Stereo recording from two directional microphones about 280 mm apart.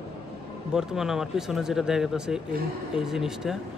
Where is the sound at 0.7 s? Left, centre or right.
Centre.